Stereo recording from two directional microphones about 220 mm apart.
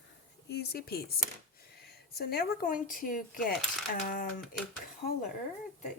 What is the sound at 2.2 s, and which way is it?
Speech, 45° left (ahead or behind).